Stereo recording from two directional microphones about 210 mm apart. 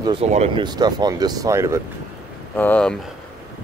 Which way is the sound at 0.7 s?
20° right (ahead or behind).